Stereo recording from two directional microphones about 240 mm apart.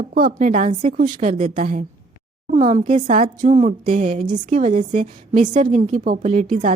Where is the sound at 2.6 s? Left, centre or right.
Centre.